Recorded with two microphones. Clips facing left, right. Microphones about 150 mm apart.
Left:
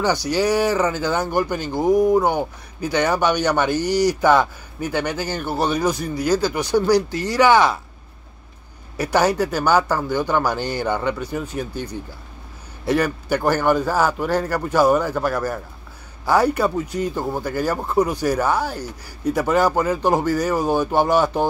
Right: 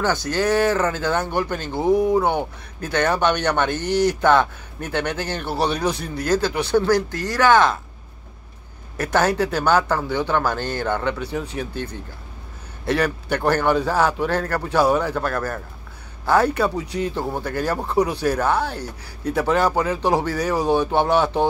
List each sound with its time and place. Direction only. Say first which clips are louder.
0.3 s speech: right 1 dB; 10° left (ahead or behind)
3.8 s speech: left 1 dB; 55° right (ahead or behind)
4.2 s speech: left 1 dB; 5° left (ahead or behind)
8.9 s a man's voice: left 1 dB; 10° left (ahead or behind)